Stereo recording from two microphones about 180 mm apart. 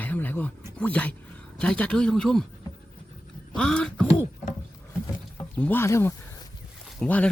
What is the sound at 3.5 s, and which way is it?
Speech, 5° left (ahead or behind).